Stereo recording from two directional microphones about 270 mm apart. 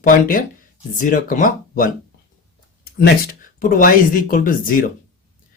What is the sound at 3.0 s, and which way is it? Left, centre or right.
Speech, left.